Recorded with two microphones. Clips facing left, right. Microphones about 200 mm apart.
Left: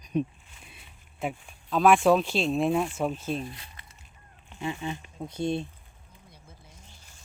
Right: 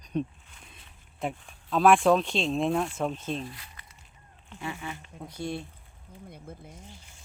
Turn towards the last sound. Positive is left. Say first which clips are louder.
# right 10 dB
turn(degrees=-55)  # may be behind; listen again after turning